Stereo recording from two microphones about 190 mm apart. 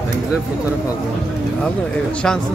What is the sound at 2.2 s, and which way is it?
Speech, 5° left (ahead or behind).